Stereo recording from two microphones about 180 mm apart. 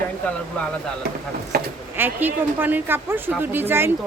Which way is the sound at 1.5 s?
60° right (ahead or behind).